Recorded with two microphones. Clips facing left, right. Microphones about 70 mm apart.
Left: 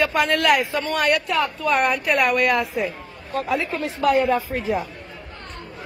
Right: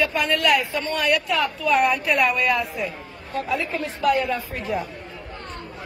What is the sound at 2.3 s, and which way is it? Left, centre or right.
A woman's voice, left.